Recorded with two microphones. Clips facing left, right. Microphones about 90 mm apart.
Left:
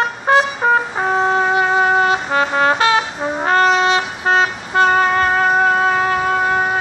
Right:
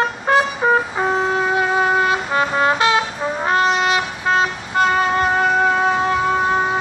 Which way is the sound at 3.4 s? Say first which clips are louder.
Left 3 dB; 45° left (ahead or behind).